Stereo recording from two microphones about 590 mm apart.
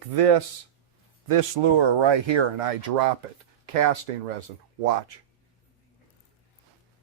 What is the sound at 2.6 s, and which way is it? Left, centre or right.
Speech, right.